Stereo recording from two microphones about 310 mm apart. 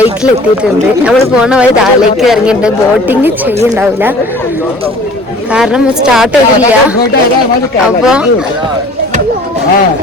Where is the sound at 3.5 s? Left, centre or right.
Right.